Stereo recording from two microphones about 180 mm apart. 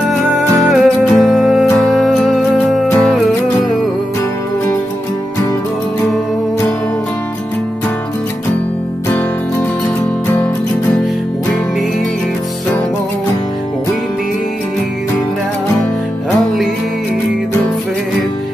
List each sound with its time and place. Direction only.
0.7 s music: centre (ahead or behind)